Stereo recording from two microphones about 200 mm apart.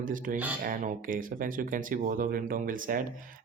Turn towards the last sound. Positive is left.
turn(degrees=-45)  # may be behind; listen again after turning